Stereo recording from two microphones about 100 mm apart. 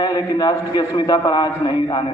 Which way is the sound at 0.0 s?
45° left (ahead or behind).